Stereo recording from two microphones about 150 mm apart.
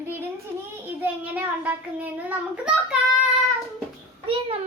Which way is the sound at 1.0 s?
10° right (ahead or behind).